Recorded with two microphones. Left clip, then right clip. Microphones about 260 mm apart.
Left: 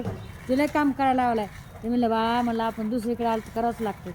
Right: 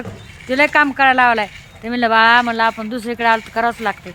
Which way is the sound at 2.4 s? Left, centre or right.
Right.